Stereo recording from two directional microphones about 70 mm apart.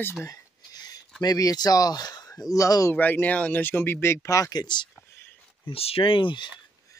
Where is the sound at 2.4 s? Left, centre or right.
Left.